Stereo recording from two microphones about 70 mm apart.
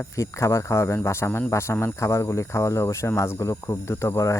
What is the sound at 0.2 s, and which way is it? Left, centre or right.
Speech, left.